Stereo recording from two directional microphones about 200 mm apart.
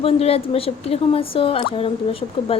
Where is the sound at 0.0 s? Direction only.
30° left (ahead or behind).